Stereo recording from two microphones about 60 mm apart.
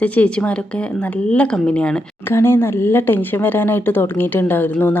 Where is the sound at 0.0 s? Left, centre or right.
Left.